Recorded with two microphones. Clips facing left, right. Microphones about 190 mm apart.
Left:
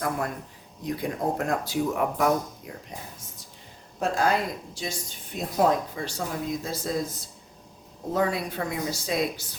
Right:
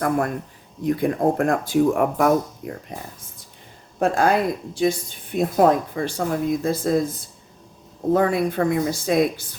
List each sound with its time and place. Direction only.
0.9 s speech: 55° right (ahead or behind)
4.0 s speech: 55° right (ahead or behind)
8.1 s speech: 55° right (ahead or behind)